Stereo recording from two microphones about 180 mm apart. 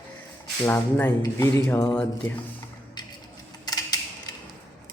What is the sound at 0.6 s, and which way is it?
Speech, 15° left (ahead or behind).